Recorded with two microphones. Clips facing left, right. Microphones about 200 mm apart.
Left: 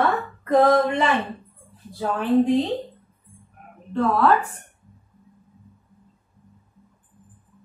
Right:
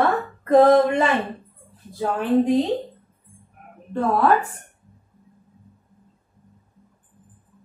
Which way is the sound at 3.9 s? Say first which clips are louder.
Even; 15° right (ahead or behind).